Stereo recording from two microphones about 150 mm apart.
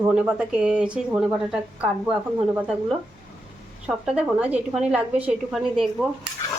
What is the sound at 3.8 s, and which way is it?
Speech, 5° right (ahead or behind).